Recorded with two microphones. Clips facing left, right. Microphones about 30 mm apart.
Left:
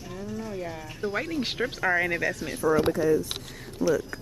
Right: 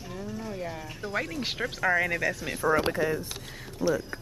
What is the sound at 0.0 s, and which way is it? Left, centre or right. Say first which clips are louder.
Livestock: left 1 dB; centre.